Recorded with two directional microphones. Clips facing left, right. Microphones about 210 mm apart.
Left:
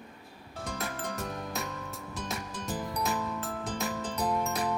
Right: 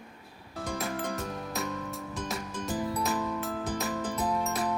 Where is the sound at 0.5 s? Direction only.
Centre (ahead or behind).